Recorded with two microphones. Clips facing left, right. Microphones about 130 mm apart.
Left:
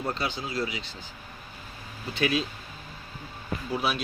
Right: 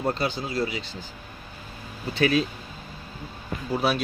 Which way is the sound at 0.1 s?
40° right (ahead or behind).